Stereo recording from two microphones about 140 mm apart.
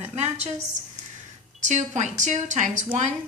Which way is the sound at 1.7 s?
55° right (ahead or behind).